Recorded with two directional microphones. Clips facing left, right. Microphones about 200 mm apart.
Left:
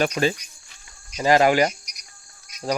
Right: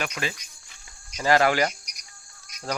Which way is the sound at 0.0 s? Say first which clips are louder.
Left 10 dB; 30° left (ahead or behind).